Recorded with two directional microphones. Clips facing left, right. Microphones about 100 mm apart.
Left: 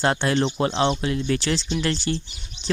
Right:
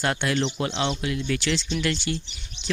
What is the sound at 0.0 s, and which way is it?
Speech, 30° left (ahead or behind).